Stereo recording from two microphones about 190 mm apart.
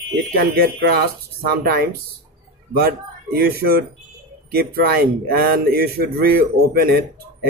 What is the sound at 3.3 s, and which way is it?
Speech, 55° right (ahead or behind).